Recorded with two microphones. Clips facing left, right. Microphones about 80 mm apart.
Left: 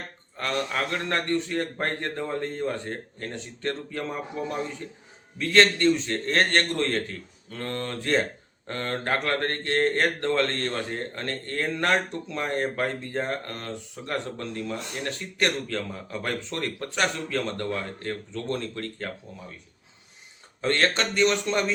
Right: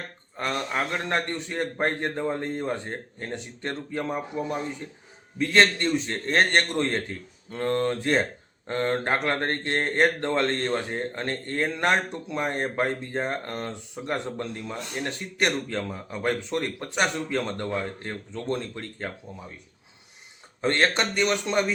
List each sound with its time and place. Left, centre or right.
0.3 s speech: right
20.6 s a man's voice: centre